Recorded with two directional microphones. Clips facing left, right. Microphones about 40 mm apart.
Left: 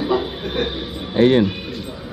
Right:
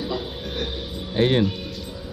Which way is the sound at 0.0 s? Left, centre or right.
Left.